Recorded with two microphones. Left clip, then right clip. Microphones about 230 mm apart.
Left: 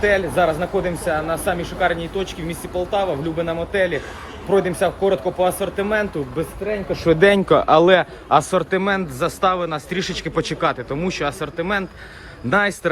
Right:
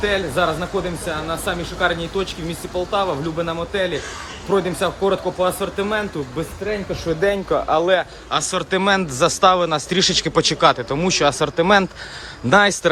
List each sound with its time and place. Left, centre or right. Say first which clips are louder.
0.0 s speech: left 2 dB; centre
7.2 s speech: left 4 dB; left
8.3 s a man's voice: left 6 dB; centre
8.7 s speech: right 2 dB; centre